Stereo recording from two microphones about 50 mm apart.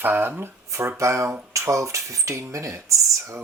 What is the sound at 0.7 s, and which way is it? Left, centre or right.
Speech, right.